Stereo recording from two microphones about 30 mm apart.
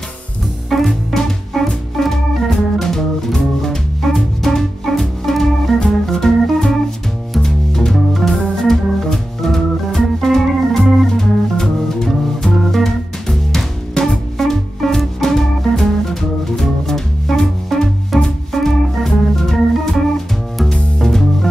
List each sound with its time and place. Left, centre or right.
0.7 s music: centre
1.5 s organ: centre
3.6 s music: centre
6.4 s organ: centre
7.4 s music: centre
7.9 s organ: centre
11.1 s music: centre